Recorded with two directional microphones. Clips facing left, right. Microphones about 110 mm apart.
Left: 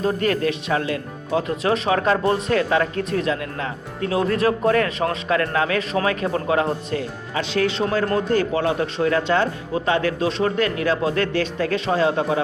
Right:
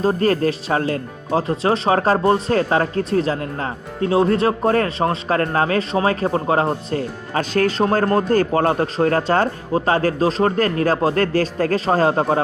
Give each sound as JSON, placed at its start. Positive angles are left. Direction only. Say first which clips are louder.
{"t": 0.0, "sound": "speech", "louder": "right 3 dB", "side_deg": -35}